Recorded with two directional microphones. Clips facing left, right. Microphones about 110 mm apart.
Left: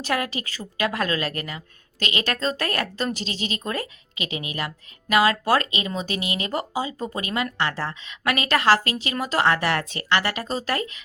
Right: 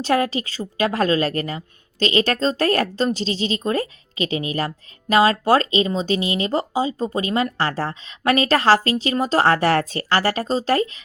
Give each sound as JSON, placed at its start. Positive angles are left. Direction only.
{"t": 0.0, "sound": "a woman's voice", "side_deg": -30}